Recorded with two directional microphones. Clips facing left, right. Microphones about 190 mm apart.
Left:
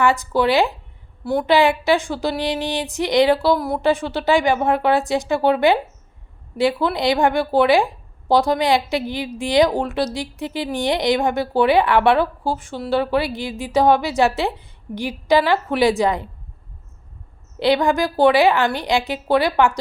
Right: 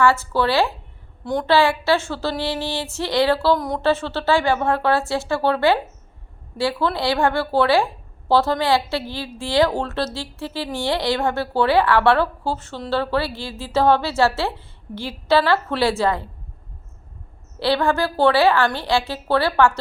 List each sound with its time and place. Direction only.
0.0 s a woman's voice: 15° left (ahead or behind)
17.6 s a woman's voice: 15° left (ahead or behind)